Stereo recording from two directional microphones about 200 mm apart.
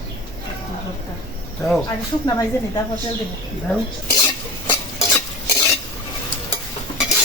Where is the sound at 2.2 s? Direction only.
20° left (ahead or behind).